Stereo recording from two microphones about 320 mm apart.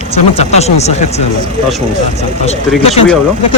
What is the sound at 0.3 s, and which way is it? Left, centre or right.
Speech, centre.